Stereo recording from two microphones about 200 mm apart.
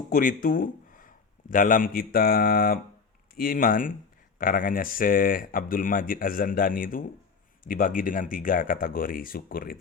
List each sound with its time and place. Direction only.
0.1 s speech: 45° left (ahead or behind)